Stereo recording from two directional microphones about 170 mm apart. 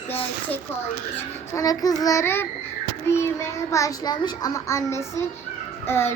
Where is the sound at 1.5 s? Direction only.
20° left (ahead or behind).